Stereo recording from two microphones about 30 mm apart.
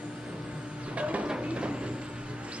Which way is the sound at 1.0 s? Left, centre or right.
Right.